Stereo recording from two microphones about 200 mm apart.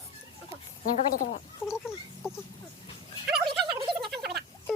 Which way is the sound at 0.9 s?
40° left (ahead or behind).